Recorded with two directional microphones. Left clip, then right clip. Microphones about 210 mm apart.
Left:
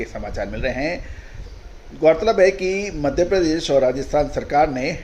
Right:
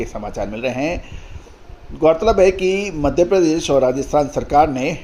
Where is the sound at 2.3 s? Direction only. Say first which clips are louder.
Right 2 dB; 30° right (ahead or behind).